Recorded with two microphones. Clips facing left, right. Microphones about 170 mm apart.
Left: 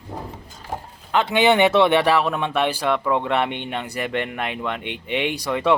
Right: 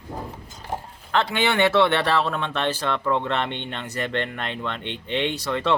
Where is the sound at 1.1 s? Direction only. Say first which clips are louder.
Left 5 dB; 15° left (ahead or behind).